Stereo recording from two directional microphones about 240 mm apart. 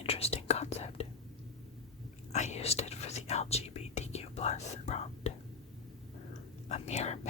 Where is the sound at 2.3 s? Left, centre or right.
Left.